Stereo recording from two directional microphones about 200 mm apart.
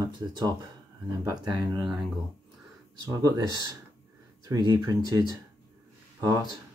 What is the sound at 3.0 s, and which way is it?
Speech, 20° right (ahead or behind).